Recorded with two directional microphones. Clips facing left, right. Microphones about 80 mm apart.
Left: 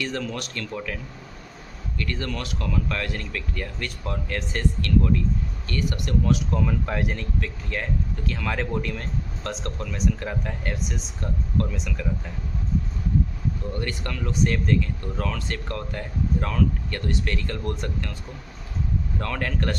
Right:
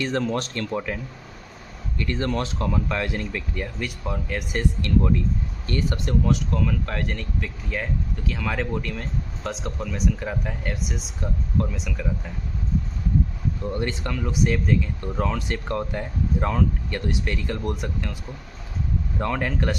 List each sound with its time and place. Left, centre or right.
0.0 s speech: right
2.0 s speech: right
6.2 s speech: centre
7.3 s speech: centre
13.7 s speech: right
15.0 s speech: right
19.2 s speech: centre